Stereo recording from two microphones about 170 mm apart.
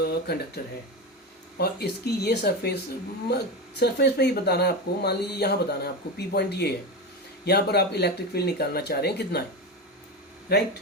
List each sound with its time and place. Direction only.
0.0 s speech: 70° left (ahead or behind)
10.5 s speech: 70° left (ahead or behind)